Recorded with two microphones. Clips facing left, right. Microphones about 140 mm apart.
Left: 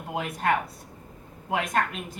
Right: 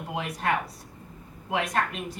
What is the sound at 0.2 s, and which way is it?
Speech, 50° left (ahead or behind).